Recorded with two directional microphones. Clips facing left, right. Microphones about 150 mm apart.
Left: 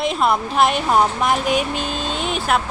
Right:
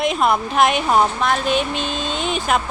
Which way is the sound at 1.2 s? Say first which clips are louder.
Even; 15° left (ahead or behind).